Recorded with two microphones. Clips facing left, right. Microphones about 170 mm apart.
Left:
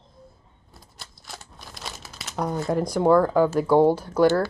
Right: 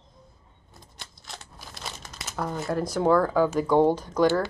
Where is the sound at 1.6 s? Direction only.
5° left (ahead or behind).